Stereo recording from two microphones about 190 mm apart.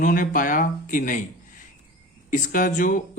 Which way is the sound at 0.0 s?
45° left (ahead or behind).